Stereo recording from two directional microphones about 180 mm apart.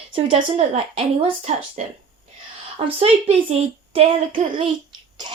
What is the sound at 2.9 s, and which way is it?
A child's voice, 35° right (ahead or behind).